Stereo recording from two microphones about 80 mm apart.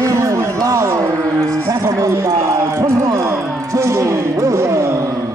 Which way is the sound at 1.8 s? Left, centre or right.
Right.